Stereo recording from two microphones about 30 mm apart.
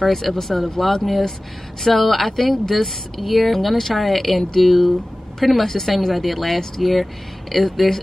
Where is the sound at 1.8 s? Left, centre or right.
Centre.